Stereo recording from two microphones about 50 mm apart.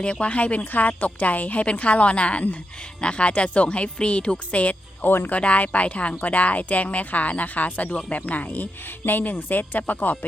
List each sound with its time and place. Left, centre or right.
0.0 s speech: left
5.0 s speech: left
5.4 s speech: left